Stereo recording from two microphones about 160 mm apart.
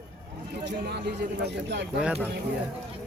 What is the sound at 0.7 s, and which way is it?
Speech, 90° right.